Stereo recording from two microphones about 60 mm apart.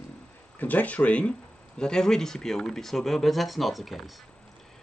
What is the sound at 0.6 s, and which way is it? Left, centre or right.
Speech, left.